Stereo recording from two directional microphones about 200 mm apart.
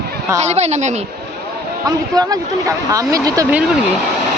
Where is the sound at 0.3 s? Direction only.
35° right (ahead or behind).